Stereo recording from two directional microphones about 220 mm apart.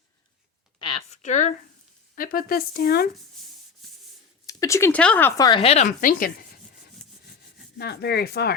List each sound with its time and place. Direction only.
0.8 s a sound: 25° left (ahead or behind)
2.1 s speech: 40° left (ahead or behind)
3.8 s rub: centre (ahead or behind)
4.4 s speech: 15° left (ahead or behind)
5.5 s speech: 25° left (ahead or behind); by 8.5 s 45° left (ahead or behind)